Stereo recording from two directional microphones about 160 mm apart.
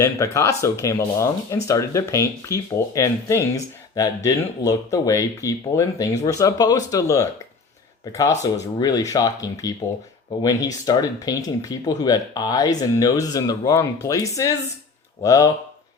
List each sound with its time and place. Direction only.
0.0 s speech: 20° left (ahead or behind)